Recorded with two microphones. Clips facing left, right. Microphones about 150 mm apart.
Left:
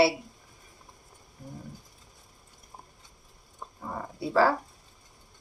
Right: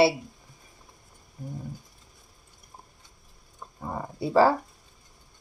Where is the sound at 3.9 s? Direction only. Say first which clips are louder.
Right 4 dB; 20° right (ahead or behind).